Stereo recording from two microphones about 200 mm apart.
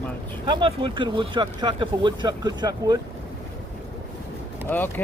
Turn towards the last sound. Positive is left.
turn(degrees=10)  # may be behind; listen again after turning